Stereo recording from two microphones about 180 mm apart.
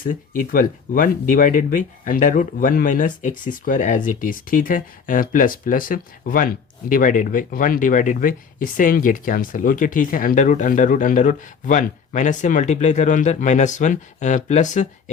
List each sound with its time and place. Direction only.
0.0 s speech: 50° left (ahead or behind)